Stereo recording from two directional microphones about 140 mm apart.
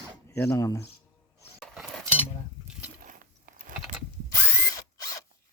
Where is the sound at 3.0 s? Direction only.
70° right (ahead or behind).